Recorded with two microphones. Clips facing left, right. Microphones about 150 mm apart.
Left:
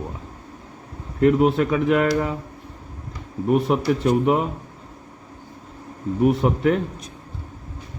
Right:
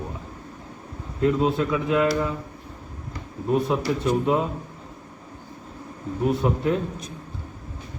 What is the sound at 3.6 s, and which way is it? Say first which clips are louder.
Speech: left 4 dB; 85° left.